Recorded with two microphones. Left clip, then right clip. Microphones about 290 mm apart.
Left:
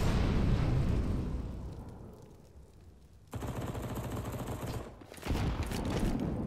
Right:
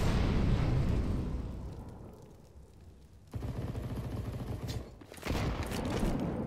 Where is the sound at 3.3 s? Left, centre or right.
Left.